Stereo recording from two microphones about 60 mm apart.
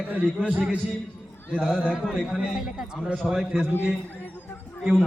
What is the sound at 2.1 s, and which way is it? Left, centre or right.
A man's voice, centre.